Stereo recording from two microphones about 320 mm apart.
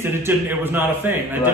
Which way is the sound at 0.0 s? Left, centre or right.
Centre.